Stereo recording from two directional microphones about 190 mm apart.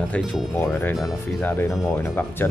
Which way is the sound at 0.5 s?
15° left (ahead or behind).